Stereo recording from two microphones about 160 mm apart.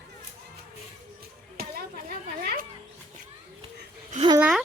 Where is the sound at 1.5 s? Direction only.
65° right (ahead or behind).